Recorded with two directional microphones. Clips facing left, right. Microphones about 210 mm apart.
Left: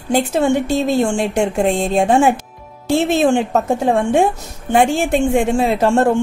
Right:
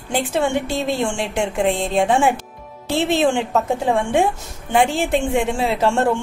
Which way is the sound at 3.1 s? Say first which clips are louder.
Left 1 dB; 45° left (ahead or behind).